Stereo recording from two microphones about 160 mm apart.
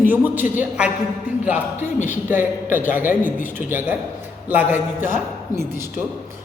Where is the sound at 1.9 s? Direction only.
50° left (ahead or behind).